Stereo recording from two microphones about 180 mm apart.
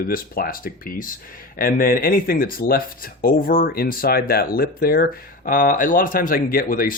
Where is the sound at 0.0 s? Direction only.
50° left (ahead or behind).